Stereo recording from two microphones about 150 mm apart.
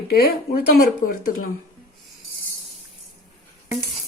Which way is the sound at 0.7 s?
75° left (ahead or behind).